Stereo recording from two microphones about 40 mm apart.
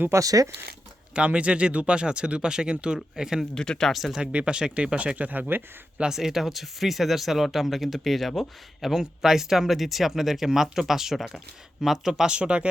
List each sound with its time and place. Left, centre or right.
1.1 s speech: right
3.5 s speech: centre
3.9 s speech: centre
4.2 s speech: right
5.1 s speech: right
6.1 s speech: centre
12.2 s speech: right